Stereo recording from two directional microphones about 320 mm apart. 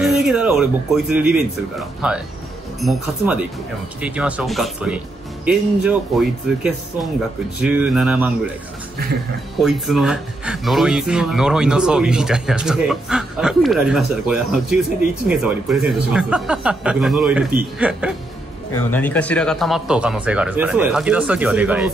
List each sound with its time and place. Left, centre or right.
0.0 s speech: centre
9.6 s speech: centre
18.7 s speech: centre